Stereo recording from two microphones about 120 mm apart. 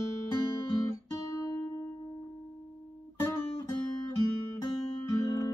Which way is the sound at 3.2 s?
25° left (ahead or behind).